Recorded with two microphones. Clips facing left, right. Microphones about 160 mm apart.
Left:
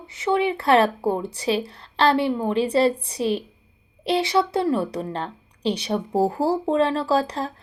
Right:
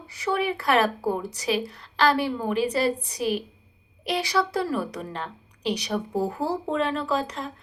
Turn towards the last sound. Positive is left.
turn(degrees=35)  # may be behind; listen again after turning